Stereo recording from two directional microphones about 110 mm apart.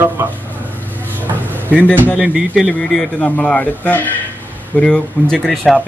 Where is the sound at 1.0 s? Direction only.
15° right (ahead or behind).